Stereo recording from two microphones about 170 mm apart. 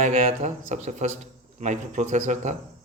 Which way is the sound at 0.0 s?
40° right (ahead or behind).